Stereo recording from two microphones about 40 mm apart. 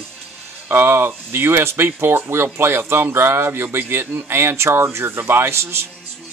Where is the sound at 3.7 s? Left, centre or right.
Right.